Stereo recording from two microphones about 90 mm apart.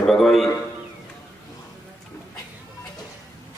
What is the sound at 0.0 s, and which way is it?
Speech, centre (ahead or behind).